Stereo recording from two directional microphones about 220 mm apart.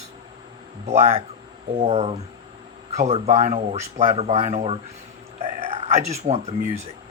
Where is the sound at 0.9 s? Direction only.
30° right (ahead or behind).